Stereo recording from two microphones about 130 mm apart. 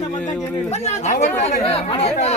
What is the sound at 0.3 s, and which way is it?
Speech, 60° left (ahead or behind).